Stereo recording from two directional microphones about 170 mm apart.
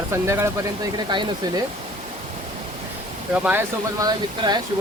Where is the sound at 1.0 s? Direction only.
25° right (ahead or behind).